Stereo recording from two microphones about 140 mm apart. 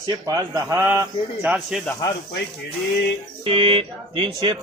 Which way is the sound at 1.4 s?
Centre (ahead or behind).